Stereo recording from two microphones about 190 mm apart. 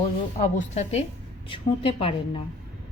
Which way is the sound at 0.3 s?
40° left (ahead or behind).